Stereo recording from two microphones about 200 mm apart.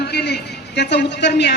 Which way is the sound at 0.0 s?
50° left (ahead or behind).